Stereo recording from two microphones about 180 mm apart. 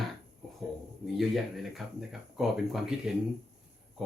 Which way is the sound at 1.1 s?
Centre (ahead or behind).